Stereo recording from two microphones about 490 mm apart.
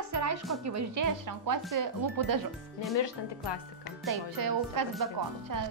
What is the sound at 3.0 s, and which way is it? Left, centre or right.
Speech, left.